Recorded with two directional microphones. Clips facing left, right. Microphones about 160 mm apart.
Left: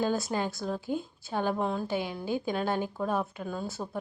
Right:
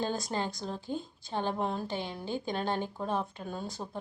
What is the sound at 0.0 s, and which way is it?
Speech, 5° left (ahead or behind).